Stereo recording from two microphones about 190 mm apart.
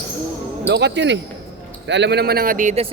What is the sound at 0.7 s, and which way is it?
A man's voice, 65° right (ahead or behind).